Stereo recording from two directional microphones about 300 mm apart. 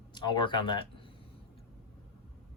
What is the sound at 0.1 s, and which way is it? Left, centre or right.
Speech, centre.